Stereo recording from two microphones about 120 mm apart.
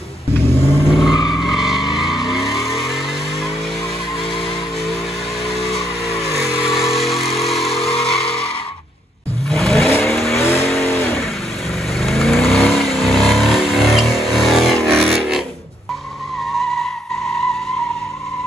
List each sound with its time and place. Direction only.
0.9 s vehicle: 5° right (ahead or behind)
5.5 s vehicle: centre (ahead or behind)
9.5 s vehicle: 5° left (ahead or behind)
10.4 s vehicle: 20° left (ahead or behind)
12.0 s vehicle: centre (ahead or behind)